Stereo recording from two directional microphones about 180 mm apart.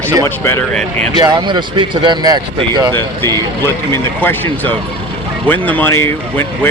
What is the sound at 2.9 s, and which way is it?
Speech, 15° left (ahead or behind).